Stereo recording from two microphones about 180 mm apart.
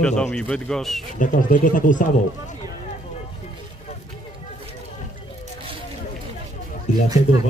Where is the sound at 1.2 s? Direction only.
50° left (ahead or behind).